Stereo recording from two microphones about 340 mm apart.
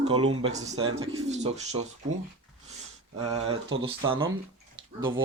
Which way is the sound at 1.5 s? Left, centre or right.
Centre.